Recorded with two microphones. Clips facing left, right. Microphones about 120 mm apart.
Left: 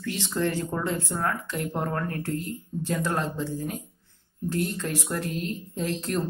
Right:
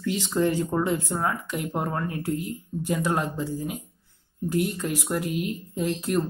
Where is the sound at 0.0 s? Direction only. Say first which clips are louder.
Right 3 dB; 15° right (ahead or behind).